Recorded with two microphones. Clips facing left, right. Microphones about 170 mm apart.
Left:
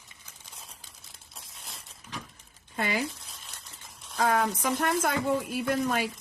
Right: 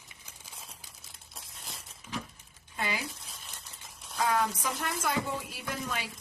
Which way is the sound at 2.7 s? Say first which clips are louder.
Left 5 dB; 55° left (ahead or behind).